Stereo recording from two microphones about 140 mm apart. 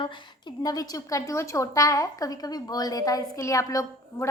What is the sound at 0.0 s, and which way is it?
A woman's voice, 35° left (ahead or behind).